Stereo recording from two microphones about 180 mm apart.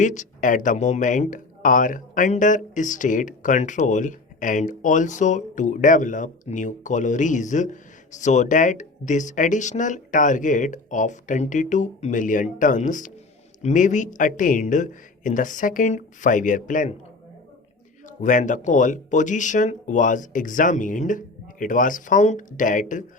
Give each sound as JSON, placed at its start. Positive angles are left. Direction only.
{"t": 0.0, "sound": "speech", "side_deg": 45}
{"t": 18.2, "sound": "speech", "side_deg": 45}